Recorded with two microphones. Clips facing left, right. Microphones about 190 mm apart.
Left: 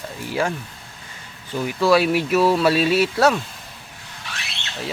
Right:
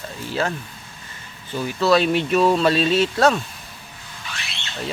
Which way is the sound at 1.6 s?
10° left (ahead or behind).